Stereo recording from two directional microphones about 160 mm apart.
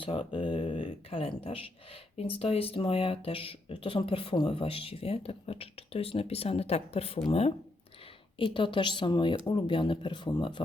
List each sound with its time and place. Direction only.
0.0 s speech: 35° left (ahead or behind)